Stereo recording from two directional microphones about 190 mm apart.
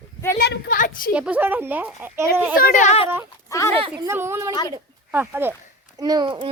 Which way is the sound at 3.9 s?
10° right (ahead or behind).